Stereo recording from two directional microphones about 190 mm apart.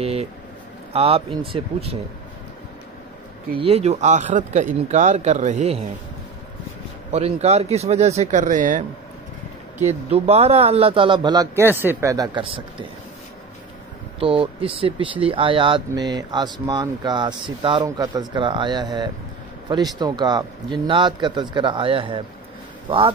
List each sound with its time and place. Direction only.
0.0 s speech: 30° right (ahead or behind)
3.5 s speech: 30° right (ahead or behind)
7.1 s speech: 35° right (ahead or behind)
14.2 s speech: 30° right (ahead or behind)